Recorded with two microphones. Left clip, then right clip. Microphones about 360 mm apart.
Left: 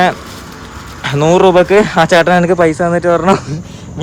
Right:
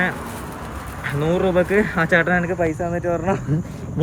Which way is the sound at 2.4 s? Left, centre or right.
Left.